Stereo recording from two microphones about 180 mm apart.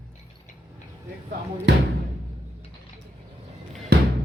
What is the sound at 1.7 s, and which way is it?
Music, 80° right.